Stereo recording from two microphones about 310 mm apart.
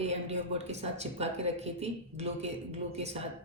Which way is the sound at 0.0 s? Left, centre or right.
Right.